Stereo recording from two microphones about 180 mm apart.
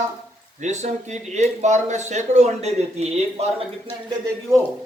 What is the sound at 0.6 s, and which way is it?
Speech, 40° right (ahead or behind).